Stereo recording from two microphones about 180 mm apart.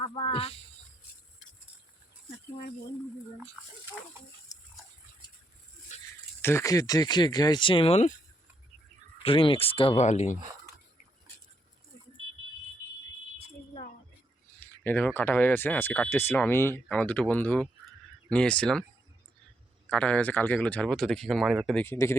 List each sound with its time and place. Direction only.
0.0 s speech: 30° left (ahead or behind)
5.9 s a sound: 40° left (ahead or behind)
6.4 s speech: 15° left (ahead or behind); by 8.1 s 35° left (ahead or behind)
9.2 s speech: 30° left (ahead or behind)
14.6 s speech: 10° left (ahead or behind)
19.9 s speech: 5° left (ahead or behind)
21.8 s speech: 15° left (ahead or behind)